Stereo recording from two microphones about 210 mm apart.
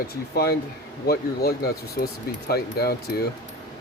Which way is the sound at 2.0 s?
45° left (ahead or behind).